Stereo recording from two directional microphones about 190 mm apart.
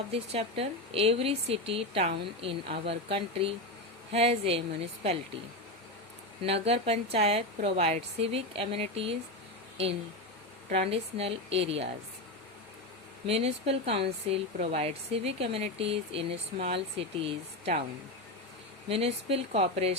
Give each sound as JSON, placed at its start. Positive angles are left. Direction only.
{"t": 0.1, "sound": "speech", "side_deg": -30}
{"t": 6.4, "sound": "speech", "side_deg": -30}
{"t": 10.7, "sound": "speech", "side_deg": -35}
{"t": 13.2, "sound": "speech", "side_deg": -30}
{"t": 18.9, "sound": "speech", "side_deg": -30}